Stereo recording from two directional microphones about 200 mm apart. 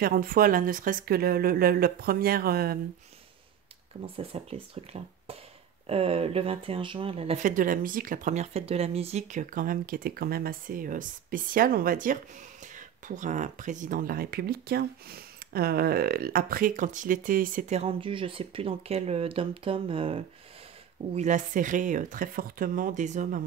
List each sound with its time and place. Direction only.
0.0 s speech: 45° right (ahead or behind)
4.0 s speech: 30° right (ahead or behind)
7.5 s speech: 45° right (ahead or behind)